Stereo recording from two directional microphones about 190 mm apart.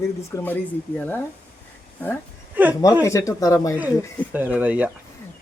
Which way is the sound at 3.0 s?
15° left (ahead or behind).